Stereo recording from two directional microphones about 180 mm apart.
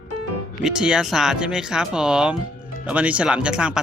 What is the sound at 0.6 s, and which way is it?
Speech, 5° right (ahead or behind).